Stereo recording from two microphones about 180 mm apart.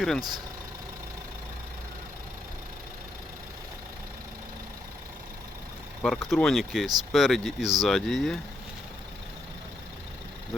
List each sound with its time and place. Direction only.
0.2 s speech: 20° right (ahead or behind)
6.0 s speech: 5° left (ahead or behind)